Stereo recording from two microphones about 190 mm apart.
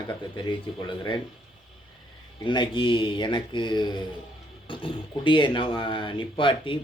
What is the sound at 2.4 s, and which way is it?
Speech, 25° left (ahead or behind).